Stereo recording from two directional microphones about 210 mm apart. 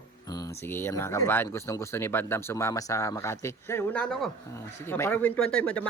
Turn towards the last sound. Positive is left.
turn(degrees=5)  # may be behind; listen again after turning